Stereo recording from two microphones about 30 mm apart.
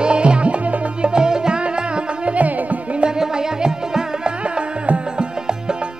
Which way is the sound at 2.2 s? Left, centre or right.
Right.